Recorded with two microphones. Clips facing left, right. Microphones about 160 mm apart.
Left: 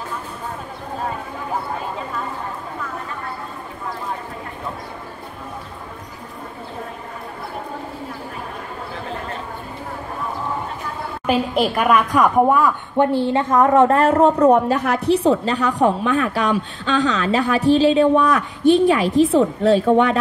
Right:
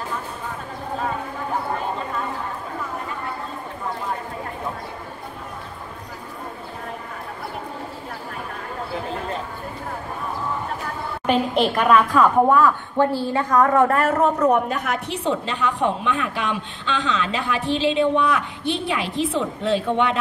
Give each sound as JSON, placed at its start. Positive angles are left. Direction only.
{"t": 11.2, "sound": "a woman's voice", "side_deg": 5}